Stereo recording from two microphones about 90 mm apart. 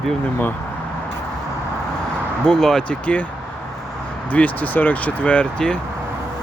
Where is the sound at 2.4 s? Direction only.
5° left (ahead or behind).